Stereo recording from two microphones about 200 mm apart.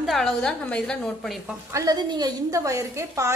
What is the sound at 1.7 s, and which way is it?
A woman's voice, 20° right (ahead or behind).